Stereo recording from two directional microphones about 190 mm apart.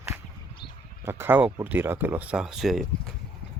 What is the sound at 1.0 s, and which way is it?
Speech, 10° right (ahead or behind).